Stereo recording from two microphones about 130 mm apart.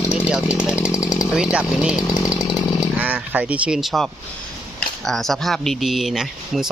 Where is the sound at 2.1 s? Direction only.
30° left (ahead or behind).